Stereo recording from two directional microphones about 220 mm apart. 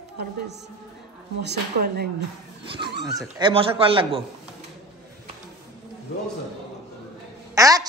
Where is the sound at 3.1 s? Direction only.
20° right (ahead or behind).